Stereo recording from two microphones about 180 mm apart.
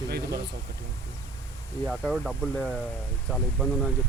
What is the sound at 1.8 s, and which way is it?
Speech, 5° right (ahead or behind).